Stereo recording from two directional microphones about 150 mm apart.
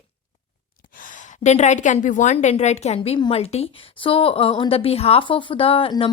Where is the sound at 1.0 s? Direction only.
55° left (ahead or behind).